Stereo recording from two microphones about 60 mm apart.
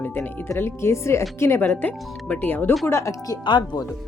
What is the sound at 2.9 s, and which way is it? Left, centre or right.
Speech, left.